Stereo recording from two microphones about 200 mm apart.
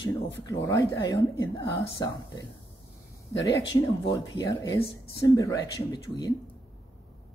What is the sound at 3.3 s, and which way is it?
Speech, 15° left (ahead or behind).